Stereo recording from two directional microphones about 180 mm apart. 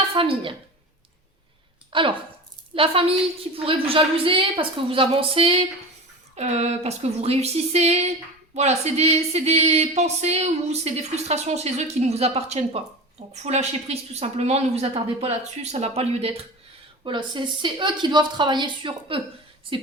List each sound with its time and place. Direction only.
0.1 s speech: 30° right (ahead or behind)
1.9 s speech: 30° right (ahead or behind)